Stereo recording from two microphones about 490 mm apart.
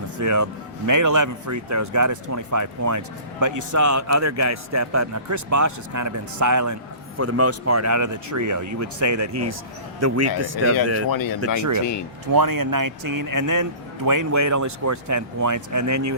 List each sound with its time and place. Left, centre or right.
0.2 s speech: right
11.1 s speech: left
12.3 s speech: right